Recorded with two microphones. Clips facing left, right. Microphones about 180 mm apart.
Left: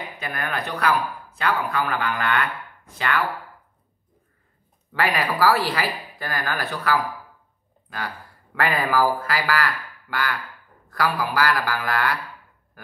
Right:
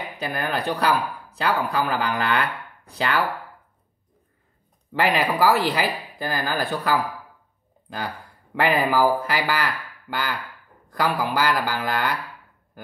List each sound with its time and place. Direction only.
0.2 s speech: 30° right (ahead or behind)
4.9 s speech: 25° right (ahead or behind)
8.8 s speech: 20° right (ahead or behind)